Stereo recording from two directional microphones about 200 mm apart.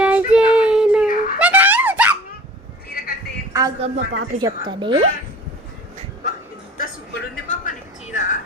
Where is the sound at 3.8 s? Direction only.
30° right (ahead or behind).